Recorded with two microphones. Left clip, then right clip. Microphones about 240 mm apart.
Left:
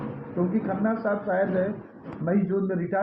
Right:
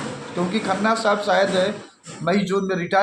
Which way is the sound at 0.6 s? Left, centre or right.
Right.